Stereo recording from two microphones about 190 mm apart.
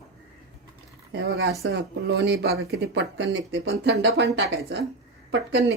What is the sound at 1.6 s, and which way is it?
Speech, 75° right (ahead or behind).